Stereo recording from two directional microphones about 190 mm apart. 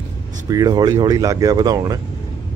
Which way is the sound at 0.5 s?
20° right (ahead or behind).